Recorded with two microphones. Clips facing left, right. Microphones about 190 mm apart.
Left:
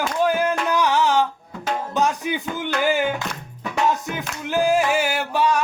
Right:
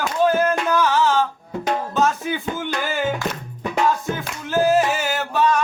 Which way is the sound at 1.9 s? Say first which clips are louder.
Left 1 dB; 15° left (ahead or behind).